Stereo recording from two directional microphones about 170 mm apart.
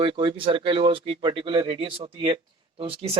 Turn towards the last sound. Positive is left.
turn(degrees=-30)  # may be behind; listen again after turning